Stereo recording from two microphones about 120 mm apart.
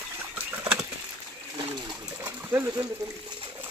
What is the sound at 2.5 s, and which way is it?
Speech, 25° right (ahead or behind).